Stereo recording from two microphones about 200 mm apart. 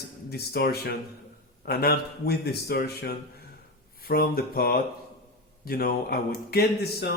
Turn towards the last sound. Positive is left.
turn(degrees=55)  # may be behind; listen again after turning